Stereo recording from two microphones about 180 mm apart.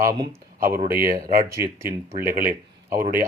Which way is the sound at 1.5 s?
15° right (ahead or behind).